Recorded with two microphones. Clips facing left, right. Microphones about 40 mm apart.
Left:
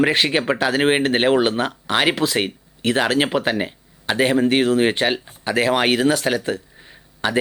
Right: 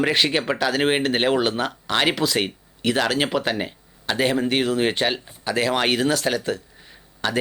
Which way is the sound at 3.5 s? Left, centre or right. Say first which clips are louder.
Left 4 dB; centre.